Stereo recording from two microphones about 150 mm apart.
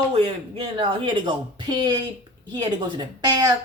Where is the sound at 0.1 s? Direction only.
40° right (ahead or behind).